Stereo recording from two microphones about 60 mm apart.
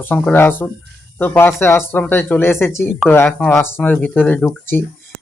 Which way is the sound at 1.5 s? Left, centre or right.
Left.